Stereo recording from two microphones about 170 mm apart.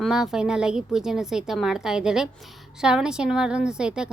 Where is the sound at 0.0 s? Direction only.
5° right (ahead or behind).